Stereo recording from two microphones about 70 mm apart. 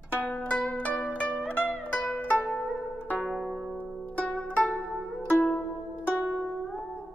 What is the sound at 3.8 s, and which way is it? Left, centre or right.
Music, centre.